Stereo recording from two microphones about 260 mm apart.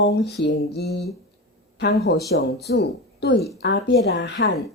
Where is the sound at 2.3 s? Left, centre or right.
Left.